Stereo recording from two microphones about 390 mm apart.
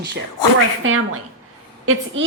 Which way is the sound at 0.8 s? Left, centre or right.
Right.